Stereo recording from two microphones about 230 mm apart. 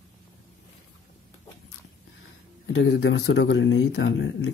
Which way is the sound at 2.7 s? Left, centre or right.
Left.